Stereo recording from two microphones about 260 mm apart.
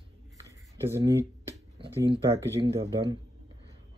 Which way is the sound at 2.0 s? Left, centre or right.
Centre.